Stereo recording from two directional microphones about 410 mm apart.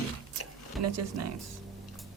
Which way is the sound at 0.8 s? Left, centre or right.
Right.